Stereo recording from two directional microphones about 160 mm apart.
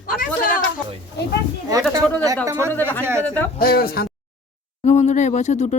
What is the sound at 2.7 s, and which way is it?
Speech, 10° left (ahead or behind).